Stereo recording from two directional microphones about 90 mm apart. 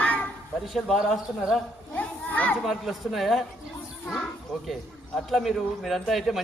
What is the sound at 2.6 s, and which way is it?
Speech, centre (ahead or behind).